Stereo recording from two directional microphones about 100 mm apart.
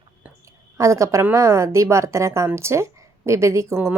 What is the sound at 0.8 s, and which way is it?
Speech, 30° right (ahead or behind).